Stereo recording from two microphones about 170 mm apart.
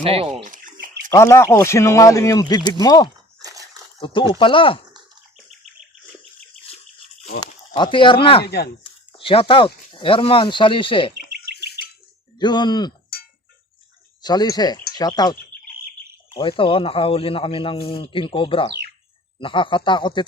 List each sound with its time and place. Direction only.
0.0 s speech: 35° right (ahead or behind)
0.4 s bathtub: 50° right (ahead or behind)
1.1 s speech: 15° left (ahead or behind)
3.4 s a sound: 20° right (ahead or behind)
4.0 s speech: 30° left (ahead or behind)
7.7 s speech: 30° left (ahead or behind)
12.4 s speech: 25° left (ahead or behind)
14.2 s speech: 25° left (ahead or behind)